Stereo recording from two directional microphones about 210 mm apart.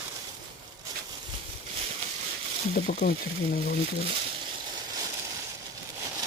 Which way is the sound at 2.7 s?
45° left (ahead or behind).